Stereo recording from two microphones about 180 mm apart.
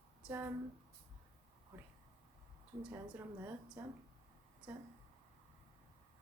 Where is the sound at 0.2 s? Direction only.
10° right (ahead or behind).